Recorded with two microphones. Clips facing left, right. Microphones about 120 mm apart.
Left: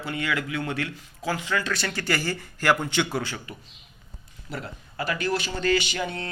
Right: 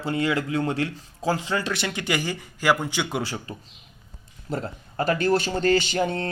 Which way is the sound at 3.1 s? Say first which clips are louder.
Right 1 dB; 30° right (ahead or behind).